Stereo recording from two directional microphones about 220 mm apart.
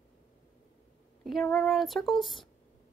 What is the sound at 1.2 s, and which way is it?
Female singing, centre (ahead or behind).